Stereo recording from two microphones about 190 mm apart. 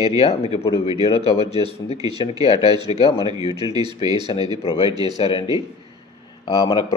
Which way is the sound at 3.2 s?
20° right (ahead or behind).